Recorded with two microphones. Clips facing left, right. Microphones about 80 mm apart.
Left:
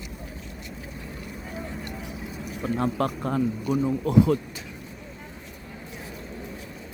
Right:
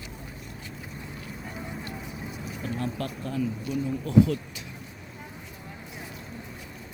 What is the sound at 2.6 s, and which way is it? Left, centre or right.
Speech, left.